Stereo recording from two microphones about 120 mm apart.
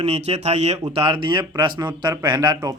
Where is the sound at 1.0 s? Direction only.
45° right (ahead or behind).